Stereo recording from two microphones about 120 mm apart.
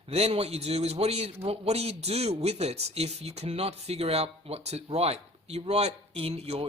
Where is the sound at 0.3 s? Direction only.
60° right (ahead or behind).